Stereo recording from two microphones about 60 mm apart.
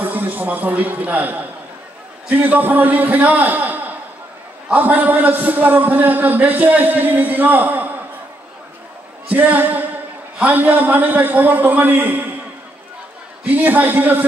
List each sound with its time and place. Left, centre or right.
0.0 s a man's voice: right
9.3 s a man's voice: right
13.5 s a man's voice: right